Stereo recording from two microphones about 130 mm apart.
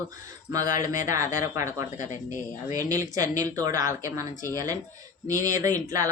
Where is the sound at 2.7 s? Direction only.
30° right (ahead or behind).